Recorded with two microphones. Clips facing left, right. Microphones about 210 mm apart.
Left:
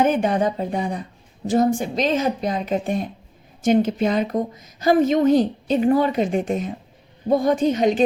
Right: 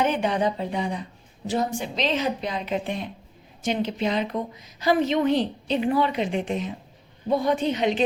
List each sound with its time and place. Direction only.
0.0 s a woman's voice: 50° left (ahead or behind)